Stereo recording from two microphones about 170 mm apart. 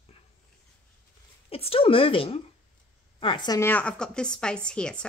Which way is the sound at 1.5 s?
35° left (ahead or behind).